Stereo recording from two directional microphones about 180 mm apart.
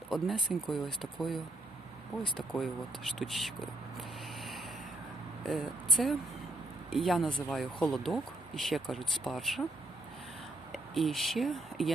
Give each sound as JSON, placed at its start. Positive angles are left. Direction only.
{"t": 0.1, "sound": "speech", "side_deg": 0}
{"t": 2.5, "sound": "speech", "side_deg": 0}
{"t": 10.7, "sound": "speech", "side_deg": 0}